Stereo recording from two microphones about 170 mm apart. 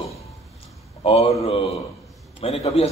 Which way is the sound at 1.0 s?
35° left (ahead or behind).